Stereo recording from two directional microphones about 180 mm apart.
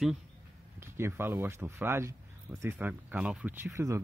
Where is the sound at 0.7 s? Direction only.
15° right (ahead or behind).